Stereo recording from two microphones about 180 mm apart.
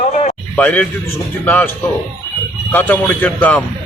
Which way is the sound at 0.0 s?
40° left (ahead or behind).